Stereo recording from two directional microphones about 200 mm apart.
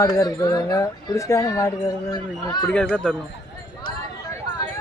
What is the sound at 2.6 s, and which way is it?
Speech, 5° left (ahead or behind).